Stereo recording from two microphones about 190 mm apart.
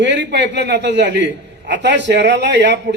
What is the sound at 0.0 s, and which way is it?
A man's voice, 65° right (ahead or behind).